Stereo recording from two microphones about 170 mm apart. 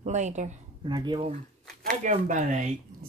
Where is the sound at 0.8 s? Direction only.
25° right (ahead or behind).